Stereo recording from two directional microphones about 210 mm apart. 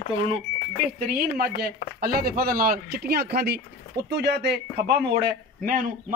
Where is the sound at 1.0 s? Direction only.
45° right (ahead or behind).